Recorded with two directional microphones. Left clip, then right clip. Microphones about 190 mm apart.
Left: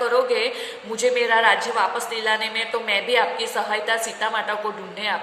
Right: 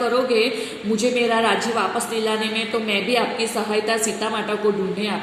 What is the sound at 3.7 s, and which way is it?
Speech, 15° right (ahead or behind).